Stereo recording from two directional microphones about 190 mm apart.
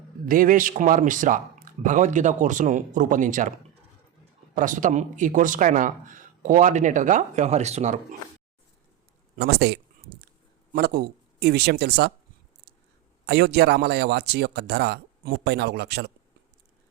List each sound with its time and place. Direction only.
0.3 s speech: 45° right (ahead or behind)
4.5 s speech: 45° right (ahead or behind)
9.3 s speech: 60° right (ahead or behind)
13.2 s a man's voice: 60° right (ahead or behind)